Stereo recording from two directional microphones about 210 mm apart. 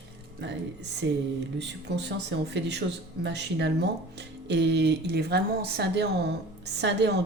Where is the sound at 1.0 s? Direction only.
60° right (ahead or behind).